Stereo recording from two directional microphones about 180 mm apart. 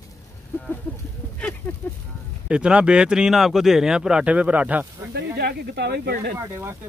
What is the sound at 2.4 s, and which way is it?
Speech, 5° right (ahead or behind).